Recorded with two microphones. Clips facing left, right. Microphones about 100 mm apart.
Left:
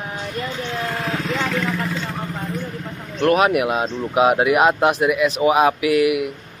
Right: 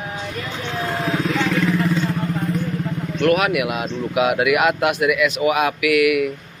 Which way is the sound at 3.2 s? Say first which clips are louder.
Left 2 dB; 35° left (ahead or behind).